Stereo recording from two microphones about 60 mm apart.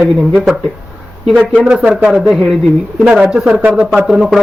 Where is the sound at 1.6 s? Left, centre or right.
Centre.